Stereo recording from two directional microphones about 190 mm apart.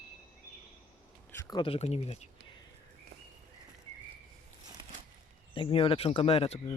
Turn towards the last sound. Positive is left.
turn(degrees=30)  # may be behind; listen again after turning